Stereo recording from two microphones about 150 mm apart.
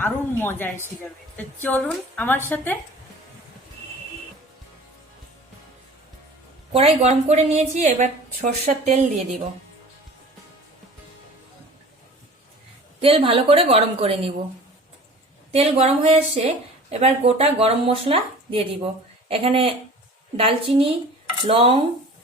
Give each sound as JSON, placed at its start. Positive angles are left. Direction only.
{"t": 0.0, "sound": "a woman's voice", "side_deg": 15}
{"t": 6.7, "sound": "a woman's voice", "side_deg": -45}
{"t": 13.0, "sound": "speech", "side_deg": -40}
{"t": 15.5, "sound": "a woman's voice", "side_deg": -45}